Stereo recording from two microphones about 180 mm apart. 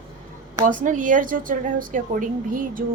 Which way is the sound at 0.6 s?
45° right (ahead or behind).